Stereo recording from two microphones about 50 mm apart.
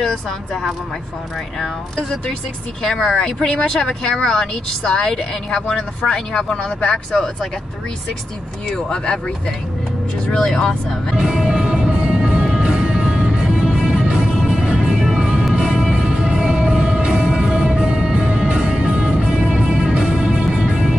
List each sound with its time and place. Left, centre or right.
0.0 s speech: centre
2.0 s speech: left
2.8 s speech: centre
8.6 s speech: centre
10.3 s speech: centre
11.1 s music: centre